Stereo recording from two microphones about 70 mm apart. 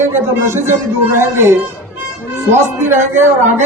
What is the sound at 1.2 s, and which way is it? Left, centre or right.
Speech, right.